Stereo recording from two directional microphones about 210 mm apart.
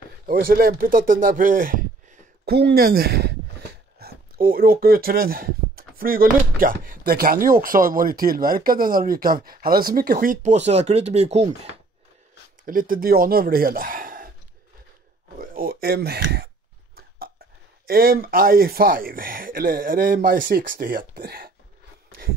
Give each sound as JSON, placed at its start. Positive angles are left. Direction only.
{"t": 0.3, "sound": "speech", "side_deg": -45}
{"t": 2.5, "sound": "speech", "side_deg": -50}
{"t": 12.6, "sound": "speech", "side_deg": -40}
{"t": 15.3, "sound": "speech", "side_deg": -45}
{"t": 17.8, "sound": "speech", "side_deg": -45}